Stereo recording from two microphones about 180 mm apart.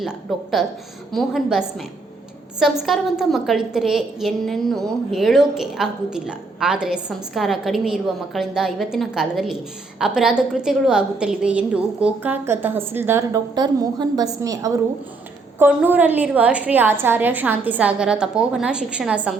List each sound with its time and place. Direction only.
0.0 s a woman's voice: centre (ahead or behind)